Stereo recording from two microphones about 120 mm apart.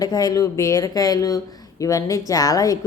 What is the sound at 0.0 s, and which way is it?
A woman's voice, 35° left (ahead or behind).